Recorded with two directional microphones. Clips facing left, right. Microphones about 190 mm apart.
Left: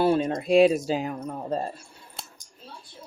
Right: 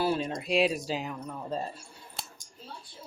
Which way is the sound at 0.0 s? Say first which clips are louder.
Left 7 dB; 55° left (ahead or behind).